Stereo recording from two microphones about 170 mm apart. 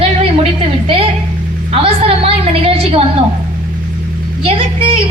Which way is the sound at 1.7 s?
35° right (ahead or behind).